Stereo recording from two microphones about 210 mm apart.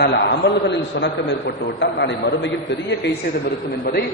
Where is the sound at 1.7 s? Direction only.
60° left (ahead or behind).